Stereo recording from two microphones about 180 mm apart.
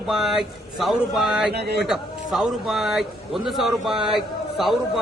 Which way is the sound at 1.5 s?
65° right (ahead or behind).